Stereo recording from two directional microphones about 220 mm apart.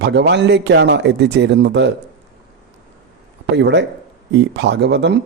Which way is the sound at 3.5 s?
50° right (ahead or behind).